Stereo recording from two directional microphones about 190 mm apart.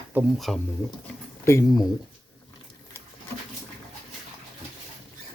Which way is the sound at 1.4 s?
15° left (ahead or behind).